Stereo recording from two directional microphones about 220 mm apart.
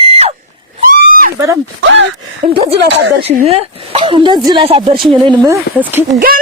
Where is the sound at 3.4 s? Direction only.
25° right (ahead or behind); by 6.0 s 10° right (ahead or behind).